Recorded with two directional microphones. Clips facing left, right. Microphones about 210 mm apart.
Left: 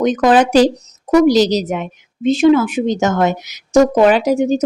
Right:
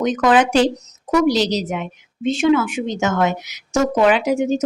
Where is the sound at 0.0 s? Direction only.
35° left (ahead or behind).